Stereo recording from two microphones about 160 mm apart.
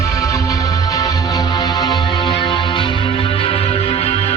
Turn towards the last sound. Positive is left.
turn(degrees=40)  # may be behind; listen again after turning